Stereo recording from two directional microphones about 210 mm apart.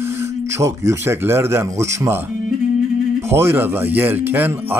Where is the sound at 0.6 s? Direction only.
15° right (ahead or behind).